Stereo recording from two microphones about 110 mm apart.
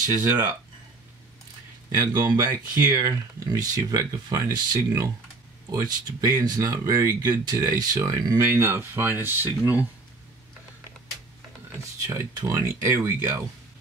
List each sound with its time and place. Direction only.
0.1 s speech: 35° right (ahead or behind)
2.0 s speech: 35° right (ahead or behind)
12.1 s speech: 30° right (ahead or behind)